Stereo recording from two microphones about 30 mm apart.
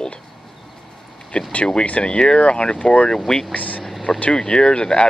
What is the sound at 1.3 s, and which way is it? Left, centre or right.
Speech, left.